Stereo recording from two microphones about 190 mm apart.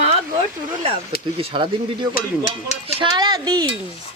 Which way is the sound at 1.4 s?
25° right (ahead or behind).